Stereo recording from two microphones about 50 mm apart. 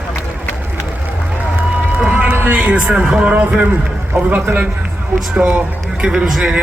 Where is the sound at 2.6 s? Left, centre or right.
Right.